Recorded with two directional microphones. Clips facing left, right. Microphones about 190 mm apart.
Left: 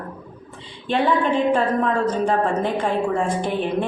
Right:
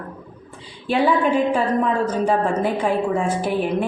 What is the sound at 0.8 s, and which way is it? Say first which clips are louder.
A woman's voice: right 1 dB; 10° right (ahead or behind).